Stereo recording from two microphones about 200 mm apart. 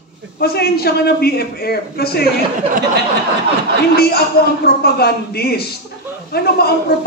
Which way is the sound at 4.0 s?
50° left (ahead or behind).